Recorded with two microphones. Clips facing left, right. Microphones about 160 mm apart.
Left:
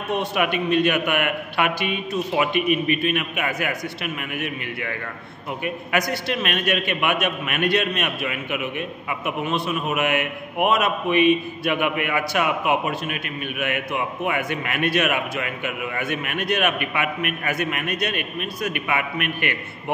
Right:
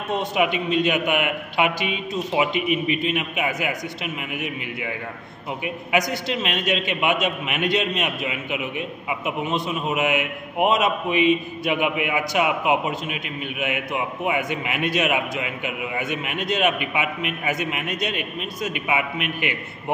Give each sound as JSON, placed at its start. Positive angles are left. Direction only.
{"t": 0.2, "sound": "a man's voice", "side_deg": -15}